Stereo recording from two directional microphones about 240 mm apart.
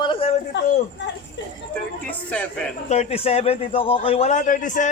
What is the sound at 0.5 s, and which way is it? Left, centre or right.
Speech, left.